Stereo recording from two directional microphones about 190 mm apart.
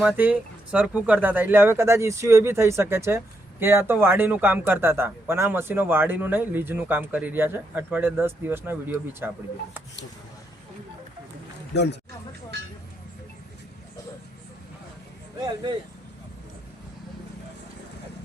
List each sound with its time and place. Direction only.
0.0 s speech: 10° right (ahead or behind)
11.7 s speech: 60° left (ahead or behind)
15.4 s speech: 25° right (ahead or behind)